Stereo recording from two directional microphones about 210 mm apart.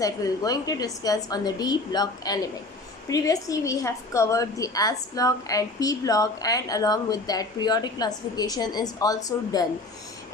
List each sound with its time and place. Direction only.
0.0 s a woman's voice: 15° left (ahead or behind)